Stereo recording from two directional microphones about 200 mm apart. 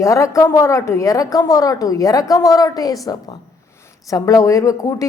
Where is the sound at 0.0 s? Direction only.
15° left (ahead or behind).